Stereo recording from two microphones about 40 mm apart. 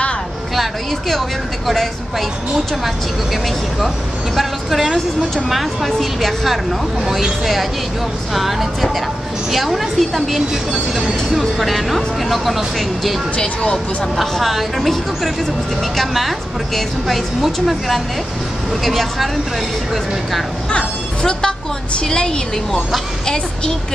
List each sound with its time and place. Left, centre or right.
0.6 s a woman's voice: centre
4.4 s a woman's voice: centre
7.1 s speech: centre
8.4 s a woman's voice: centre
10.5 s speech: centre
11.5 s a woman's voice: centre
13.4 s speech: left
14.2 s a woman's voice: centre
20.7 s music: centre
22.0 s speech: left
22.7 s a woman's voice: centre
23.2 s a woman's voice: centre